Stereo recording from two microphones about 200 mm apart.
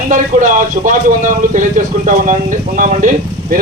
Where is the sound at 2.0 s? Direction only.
40° right (ahead or behind).